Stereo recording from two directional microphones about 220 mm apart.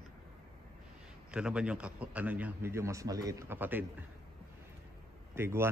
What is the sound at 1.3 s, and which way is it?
A man's voice, 5° right (ahead or behind).